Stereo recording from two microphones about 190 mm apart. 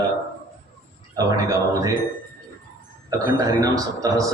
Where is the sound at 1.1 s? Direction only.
20° right (ahead or behind).